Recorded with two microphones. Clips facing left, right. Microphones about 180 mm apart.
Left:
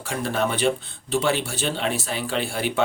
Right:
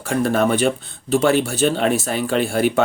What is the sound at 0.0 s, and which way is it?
Speech, 45° right (ahead or behind).